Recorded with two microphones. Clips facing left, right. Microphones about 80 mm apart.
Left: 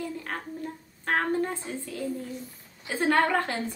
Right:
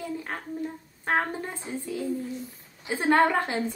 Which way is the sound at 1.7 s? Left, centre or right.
Centre.